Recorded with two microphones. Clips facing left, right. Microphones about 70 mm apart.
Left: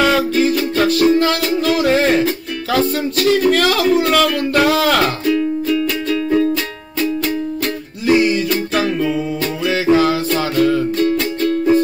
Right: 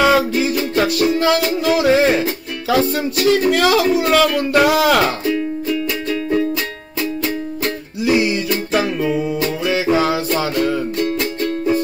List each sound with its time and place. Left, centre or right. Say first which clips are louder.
0.0 s music: even; centre
3.0 s speech: left 1 dB; centre
6.3 s music: left 3 dB; centre
10.3 s music: left 3 dB; centre